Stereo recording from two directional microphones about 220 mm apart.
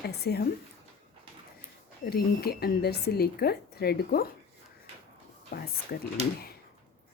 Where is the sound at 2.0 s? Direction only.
45° left (ahead or behind).